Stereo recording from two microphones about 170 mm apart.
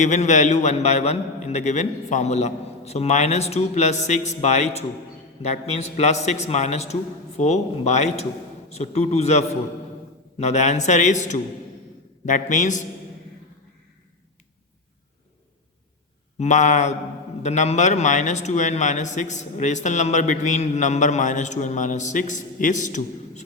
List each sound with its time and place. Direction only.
0.0 s a man's voice: 45° left (ahead or behind)
16.4 s speech: 45° left (ahead or behind)